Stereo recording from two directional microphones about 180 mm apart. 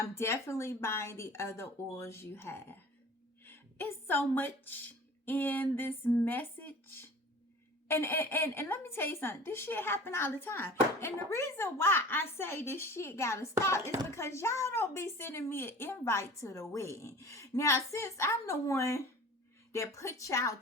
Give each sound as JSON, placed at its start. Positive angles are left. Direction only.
{"t": 0.1, "sound": "a woman's voice", "side_deg": 15}